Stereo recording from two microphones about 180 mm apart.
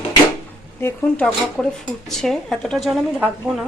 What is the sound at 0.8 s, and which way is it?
Speech, 10° left (ahead or behind).